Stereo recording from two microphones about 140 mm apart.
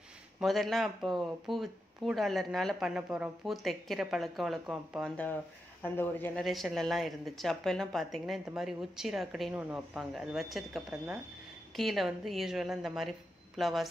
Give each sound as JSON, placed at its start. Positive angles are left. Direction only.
{"t": 0.4, "sound": "speech", "side_deg": 0}
{"t": 5.8, "sound": "speech", "side_deg": 15}
{"t": 6.4, "sound": "speech", "side_deg": 0}